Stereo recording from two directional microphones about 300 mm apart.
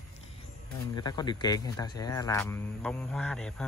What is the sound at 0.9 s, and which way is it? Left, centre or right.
Speech, centre.